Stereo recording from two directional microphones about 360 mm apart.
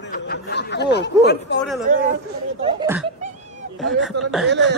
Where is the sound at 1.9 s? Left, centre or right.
Right.